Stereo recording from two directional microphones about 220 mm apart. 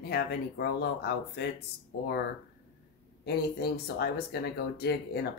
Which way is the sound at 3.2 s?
45° left (ahead or behind).